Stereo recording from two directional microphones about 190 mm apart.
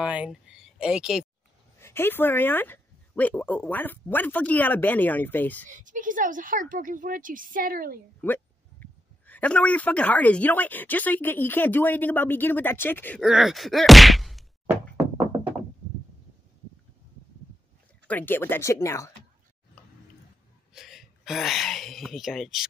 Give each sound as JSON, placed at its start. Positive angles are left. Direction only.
{"t": 0.0, "sound": "speech", "side_deg": -5}
{"t": 1.8, "sound": "speech", "side_deg": 15}
{"t": 5.7, "sound": "a woman's voice", "side_deg": -40}
{"t": 8.2, "sound": "speech", "side_deg": 10}
{"t": 13.2, "sound": "a sound", "side_deg": 0}
{"t": 18.0, "sound": "speech", "side_deg": 10}
{"t": 20.7, "sound": "speech", "side_deg": 0}